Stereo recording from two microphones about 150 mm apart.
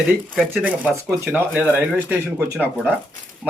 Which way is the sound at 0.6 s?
10° right (ahead or behind).